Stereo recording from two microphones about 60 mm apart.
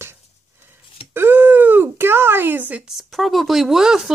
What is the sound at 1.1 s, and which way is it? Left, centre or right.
Speech, right.